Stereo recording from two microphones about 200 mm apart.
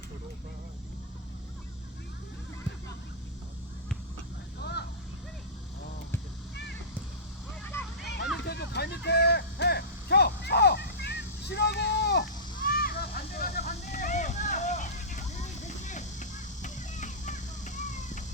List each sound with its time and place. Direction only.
4.6 s vehicle: 55° left (ahead or behind)
7.7 s vehicle: 10° left (ahead or behind)
8.4 s a sound: 55° left (ahead or behind); by 18.2 s 40° left (ahead or behind)